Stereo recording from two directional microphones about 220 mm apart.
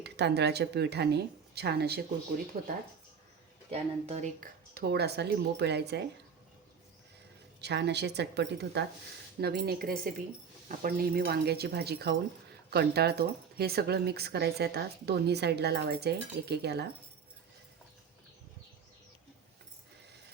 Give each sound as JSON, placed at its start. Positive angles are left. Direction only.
{"t": 0.0, "sound": "speech", "side_deg": -50}
{"t": 3.7, "sound": "speech", "side_deg": -30}
{"t": 7.6, "sound": "speech", "side_deg": -50}